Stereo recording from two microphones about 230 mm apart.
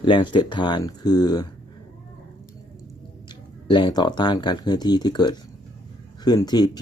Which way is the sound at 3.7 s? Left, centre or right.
Left.